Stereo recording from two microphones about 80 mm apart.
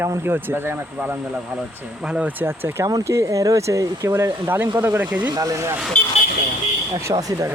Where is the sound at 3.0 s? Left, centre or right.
Right.